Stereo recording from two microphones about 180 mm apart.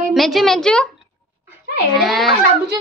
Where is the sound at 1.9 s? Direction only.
Centre (ahead or behind).